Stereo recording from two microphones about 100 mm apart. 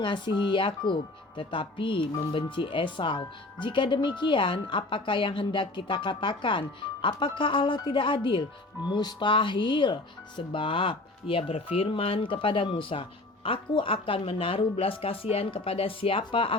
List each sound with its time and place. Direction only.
0.0 s speech: 50° left (ahead or behind)